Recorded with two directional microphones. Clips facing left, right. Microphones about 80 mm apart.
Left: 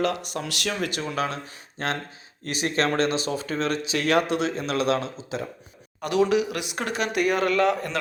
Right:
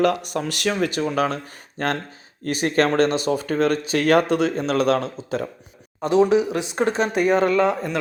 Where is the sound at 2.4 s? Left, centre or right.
Right.